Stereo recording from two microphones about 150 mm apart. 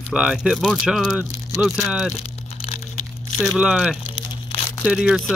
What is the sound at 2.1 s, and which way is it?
Crumpling, 40° left (ahead or behind).